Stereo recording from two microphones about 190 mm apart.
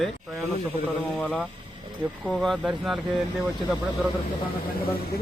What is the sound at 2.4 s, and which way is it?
Speech, centre (ahead or behind).